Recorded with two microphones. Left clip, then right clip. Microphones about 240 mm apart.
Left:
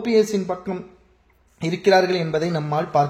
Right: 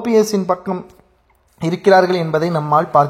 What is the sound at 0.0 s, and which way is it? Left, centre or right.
Speech, centre.